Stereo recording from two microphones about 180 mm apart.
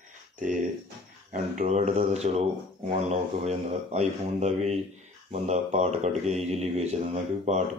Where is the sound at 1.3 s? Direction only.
40° right (ahead or behind).